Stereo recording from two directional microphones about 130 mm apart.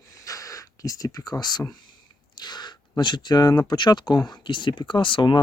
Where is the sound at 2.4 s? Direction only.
35° left (ahead or behind).